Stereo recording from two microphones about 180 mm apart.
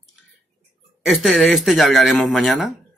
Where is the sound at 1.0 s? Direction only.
Centre (ahead or behind).